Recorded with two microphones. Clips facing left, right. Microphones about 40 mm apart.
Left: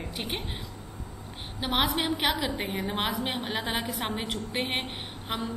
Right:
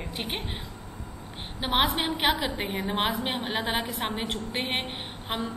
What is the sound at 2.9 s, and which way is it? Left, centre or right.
A woman's voice, right.